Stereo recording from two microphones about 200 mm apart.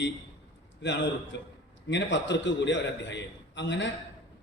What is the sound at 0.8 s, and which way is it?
A man's voice, 60° left (ahead or behind).